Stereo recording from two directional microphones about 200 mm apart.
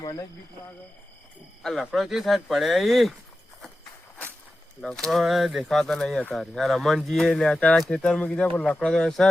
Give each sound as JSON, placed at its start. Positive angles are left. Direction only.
{"t": 0.0, "sound": "speech", "side_deg": 20}
{"t": 1.6, "sound": "speech", "side_deg": 0}
{"t": 4.8, "sound": "speech", "side_deg": 5}